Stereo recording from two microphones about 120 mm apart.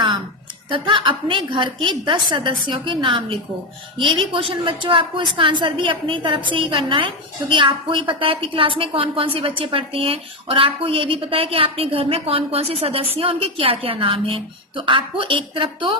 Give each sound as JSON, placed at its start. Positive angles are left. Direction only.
{"t": 0.7, "sound": "a woman's voice", "side_deg": -45}